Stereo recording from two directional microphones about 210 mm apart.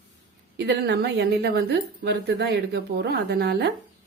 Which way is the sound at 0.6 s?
55° right (ahead or behind).